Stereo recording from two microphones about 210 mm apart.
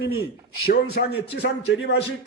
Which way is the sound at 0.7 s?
50° left (ahead or behind).